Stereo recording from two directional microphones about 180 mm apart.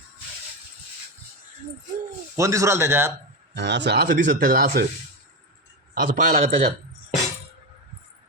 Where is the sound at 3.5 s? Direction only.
75° right (ahead or behind); by 4.9 s 55° right (ahead or behind).